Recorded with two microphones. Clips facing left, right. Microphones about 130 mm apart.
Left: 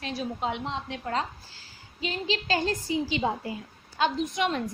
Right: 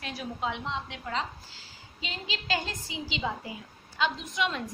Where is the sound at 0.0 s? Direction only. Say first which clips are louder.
Left 3 dB; 30° left (ahead or behind).